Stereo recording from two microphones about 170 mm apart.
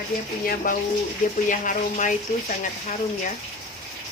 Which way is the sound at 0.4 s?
55° left (ahead or behind).